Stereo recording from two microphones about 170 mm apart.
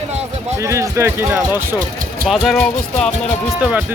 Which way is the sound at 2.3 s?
Centre (ahead or behind).